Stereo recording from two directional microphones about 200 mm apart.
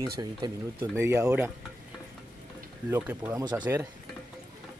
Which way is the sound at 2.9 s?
10° right (ahead or behind).